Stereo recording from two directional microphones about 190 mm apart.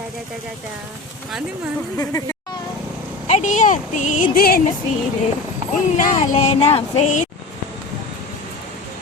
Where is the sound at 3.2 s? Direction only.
40° left (ahead or behind).